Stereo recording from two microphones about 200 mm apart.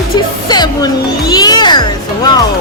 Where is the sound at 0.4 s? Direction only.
20° left (ahead or behind).